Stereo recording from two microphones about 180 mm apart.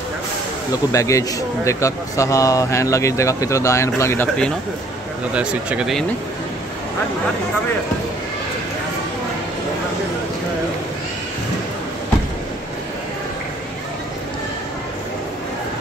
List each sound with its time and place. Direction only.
0.9 s a man's voice: 15° left (ahead or behind)
5.3 s speech: 5° right (ahead or behind)